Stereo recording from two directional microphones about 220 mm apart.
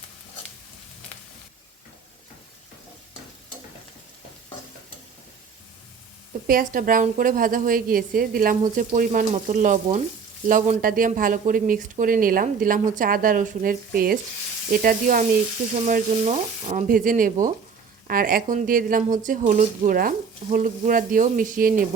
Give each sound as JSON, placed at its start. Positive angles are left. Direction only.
{"t": 6.5, "sound": "speech", "side_deg": -40}